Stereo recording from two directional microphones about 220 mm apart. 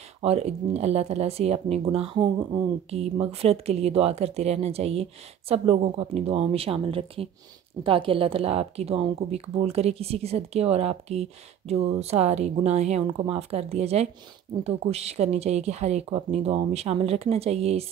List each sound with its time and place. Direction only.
0.2 s a woman's voice: 30° right (ahead or behind)